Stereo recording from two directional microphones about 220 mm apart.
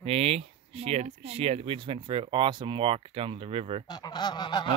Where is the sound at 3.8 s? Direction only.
20° left (ahead or behind).